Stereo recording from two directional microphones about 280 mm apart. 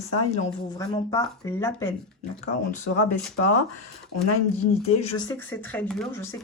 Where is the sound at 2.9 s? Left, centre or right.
Left.